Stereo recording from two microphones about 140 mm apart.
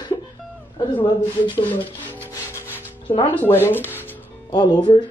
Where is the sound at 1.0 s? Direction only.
35° left (ahead or behind).